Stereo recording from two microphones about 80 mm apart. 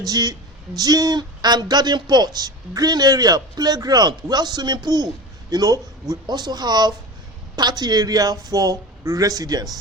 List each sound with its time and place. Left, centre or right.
0.0 s speech: right
5.5 s speech: right